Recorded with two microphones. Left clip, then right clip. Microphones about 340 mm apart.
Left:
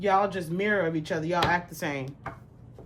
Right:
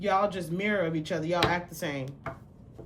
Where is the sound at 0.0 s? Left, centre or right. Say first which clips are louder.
Left 2 dB; centre.